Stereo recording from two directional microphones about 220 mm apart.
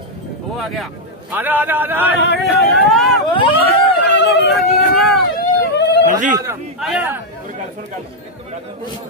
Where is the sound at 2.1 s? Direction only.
50° left (ahead or behind).